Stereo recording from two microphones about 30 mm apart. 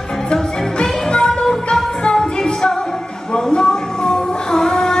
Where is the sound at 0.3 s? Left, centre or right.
Left.